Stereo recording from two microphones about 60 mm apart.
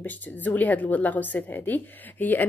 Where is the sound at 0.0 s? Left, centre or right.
Left.